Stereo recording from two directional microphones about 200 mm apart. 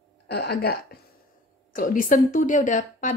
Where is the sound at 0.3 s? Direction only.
55° left (ahead or behind).